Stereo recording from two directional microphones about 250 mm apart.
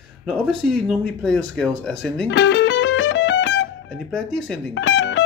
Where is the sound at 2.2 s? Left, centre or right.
Left.